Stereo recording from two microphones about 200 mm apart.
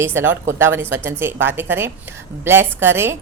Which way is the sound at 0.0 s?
10° right (ahead or behind).